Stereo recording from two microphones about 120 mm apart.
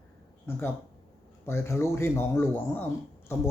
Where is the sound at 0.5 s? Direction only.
20° left (ahead or behind).